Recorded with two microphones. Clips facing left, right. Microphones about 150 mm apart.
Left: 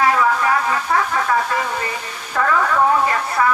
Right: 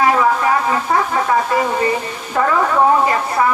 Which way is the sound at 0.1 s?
25° right (ahead or behind).